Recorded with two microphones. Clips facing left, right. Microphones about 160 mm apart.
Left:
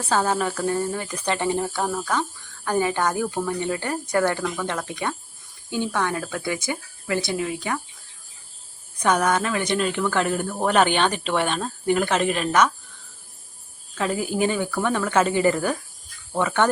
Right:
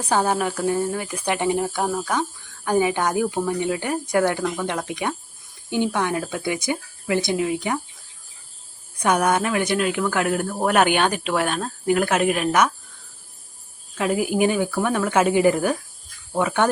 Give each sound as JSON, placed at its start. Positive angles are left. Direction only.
{"t": 0.0, "sound": "speech", "side_deg": -15}
{"t": 9.0, "sound": "speech", "side_deg": -10}
{"t": 13.9, "sound": "speech", "side_deg": -10}